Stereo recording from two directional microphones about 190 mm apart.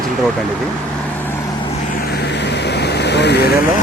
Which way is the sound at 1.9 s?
60° left (ahead or behind).